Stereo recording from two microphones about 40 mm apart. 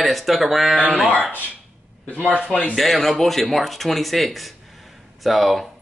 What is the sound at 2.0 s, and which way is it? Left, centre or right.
Speech, left.